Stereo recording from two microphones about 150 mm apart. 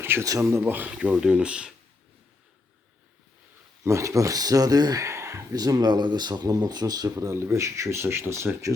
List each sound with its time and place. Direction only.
0.0 s speech: 15° right (ahead or behind)
3.8 s speech: 20° right (ahead or behind)